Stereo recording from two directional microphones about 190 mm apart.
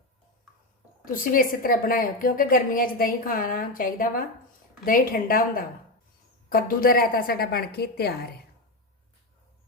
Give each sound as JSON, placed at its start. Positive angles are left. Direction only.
{"t": 1.0, "sound": "a woman's voice", "side_deg": 45}